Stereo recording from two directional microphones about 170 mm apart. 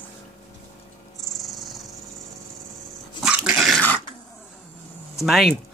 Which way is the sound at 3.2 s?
5° right (ahead or behind).